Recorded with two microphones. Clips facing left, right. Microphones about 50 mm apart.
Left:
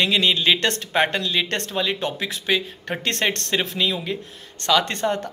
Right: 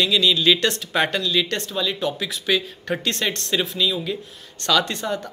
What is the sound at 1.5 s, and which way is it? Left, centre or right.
Speech, left.